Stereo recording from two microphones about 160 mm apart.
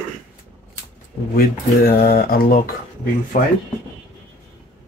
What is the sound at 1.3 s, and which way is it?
Speech, 70° left (ahead or behind).